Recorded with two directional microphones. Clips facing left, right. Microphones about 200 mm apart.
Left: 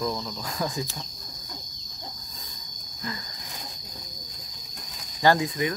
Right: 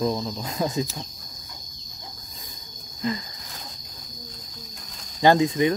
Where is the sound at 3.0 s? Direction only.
20° right (ahead or behind).